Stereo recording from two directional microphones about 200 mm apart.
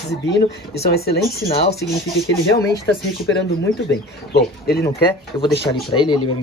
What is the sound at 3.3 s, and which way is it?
Speech, 60° left (ahead or behind).